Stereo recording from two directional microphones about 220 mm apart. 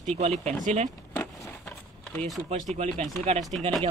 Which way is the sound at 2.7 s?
30° right (ahead or behind).